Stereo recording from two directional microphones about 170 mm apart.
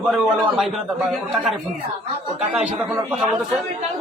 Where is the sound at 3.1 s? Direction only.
5° right (ahead or behind).